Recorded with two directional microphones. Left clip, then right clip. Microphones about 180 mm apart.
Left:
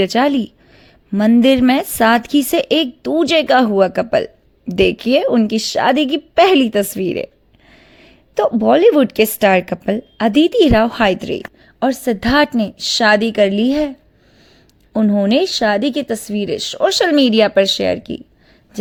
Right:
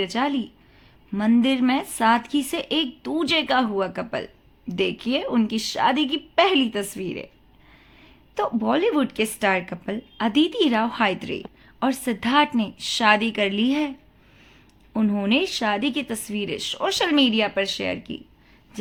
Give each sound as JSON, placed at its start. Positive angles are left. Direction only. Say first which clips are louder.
{"t": 0.0, "sound": "a woman's voice", "louder": "left 10 dB", "side_deg": 45}
{"t": 14.9, "sound": "a woman's voice", "louder": "left 8 dB", "side_deg": 30}